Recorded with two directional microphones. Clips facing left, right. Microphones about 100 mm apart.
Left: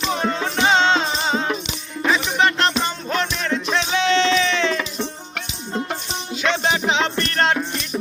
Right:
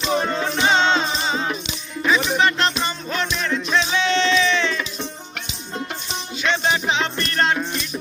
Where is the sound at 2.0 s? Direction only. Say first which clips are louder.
Even; 55° left (ahead or behind); by 4.9 s 90° left.